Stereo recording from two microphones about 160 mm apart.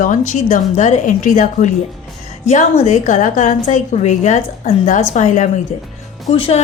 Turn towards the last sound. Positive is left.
turn(degrees=35)  # may be behind; listen again after turning